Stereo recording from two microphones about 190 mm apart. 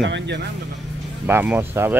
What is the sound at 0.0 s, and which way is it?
Speech, 70° right (ahead or behind).